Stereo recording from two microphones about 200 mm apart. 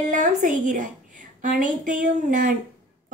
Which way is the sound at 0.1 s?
40° right (ahead or behind).